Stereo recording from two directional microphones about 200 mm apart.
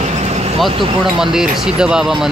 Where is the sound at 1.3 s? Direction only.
5° right (ahead or behind).